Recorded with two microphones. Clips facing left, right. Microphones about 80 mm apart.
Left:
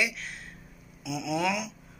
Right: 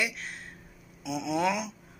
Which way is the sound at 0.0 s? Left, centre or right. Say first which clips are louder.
Left 1 dB; right.